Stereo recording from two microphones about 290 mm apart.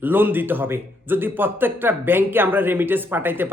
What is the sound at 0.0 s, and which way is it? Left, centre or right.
Speech, centre.